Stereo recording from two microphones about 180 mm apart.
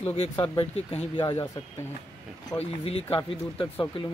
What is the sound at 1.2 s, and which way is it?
Speech, 20° left (ahead or behind).